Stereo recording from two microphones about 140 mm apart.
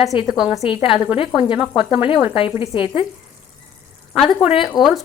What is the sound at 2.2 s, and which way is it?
Speech, 40° left (ahead or behind).